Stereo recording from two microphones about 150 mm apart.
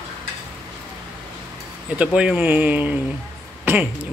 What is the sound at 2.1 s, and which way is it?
Speech, 5° right (ahead or behind).